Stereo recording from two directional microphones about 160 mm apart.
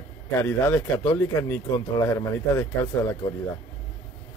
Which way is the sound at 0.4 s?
15° left (ahead or behind).